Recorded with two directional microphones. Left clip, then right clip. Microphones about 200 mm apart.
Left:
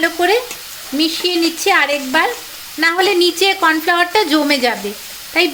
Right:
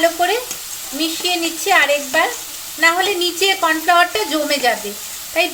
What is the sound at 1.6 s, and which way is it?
A woman's voice, 55° left (ahead or behind).